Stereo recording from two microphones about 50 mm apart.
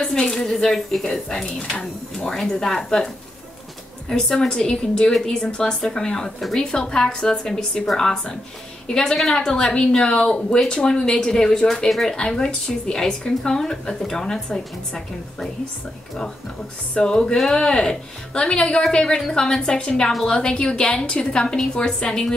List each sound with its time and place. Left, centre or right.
0.0 s speech: centre
4.1 s speech: centre
16.9 s a woman's voice: centre